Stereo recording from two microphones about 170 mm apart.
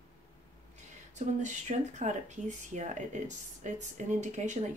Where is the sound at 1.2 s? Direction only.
45° right (ahead or behind).